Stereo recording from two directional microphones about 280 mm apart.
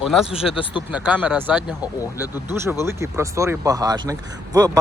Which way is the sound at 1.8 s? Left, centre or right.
Centre.